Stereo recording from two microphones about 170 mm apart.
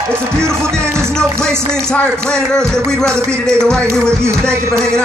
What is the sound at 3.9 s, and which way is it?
Music, 15° right (ahead or behind).